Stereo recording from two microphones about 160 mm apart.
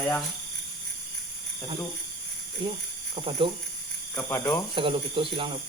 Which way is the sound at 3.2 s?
35° right (ahead or behind).